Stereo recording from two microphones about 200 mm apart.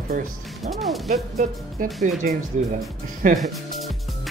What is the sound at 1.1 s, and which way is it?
Speech, 50° right (ahead or behind).